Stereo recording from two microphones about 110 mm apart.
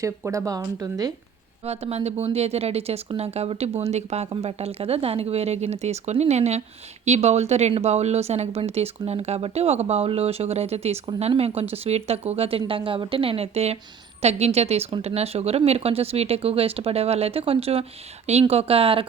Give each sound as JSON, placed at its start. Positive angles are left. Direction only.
{"t": 0.0, "sound": "speech", "side_deg": -30}
{"t": 1.6, "sound": "speech", "side_deg": -70}
{"t": 18.3, "sound": "speech", "side_deg": -75}